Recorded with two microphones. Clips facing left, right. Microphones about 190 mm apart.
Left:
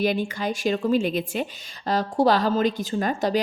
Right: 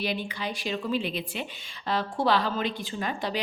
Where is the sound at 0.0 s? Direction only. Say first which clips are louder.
Left 7 dB; 45° left (ahead or behind).